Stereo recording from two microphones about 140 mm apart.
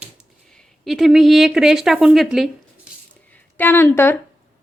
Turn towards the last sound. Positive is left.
turn(degrees=15)  # may be behind; listen again after turning